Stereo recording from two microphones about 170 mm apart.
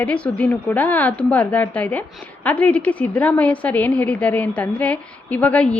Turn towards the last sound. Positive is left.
turn(degrees=5)  # may be behind; listen again after turning